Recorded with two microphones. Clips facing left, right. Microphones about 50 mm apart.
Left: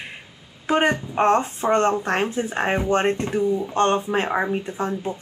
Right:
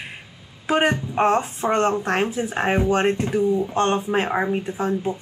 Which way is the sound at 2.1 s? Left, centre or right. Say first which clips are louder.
Even; centre.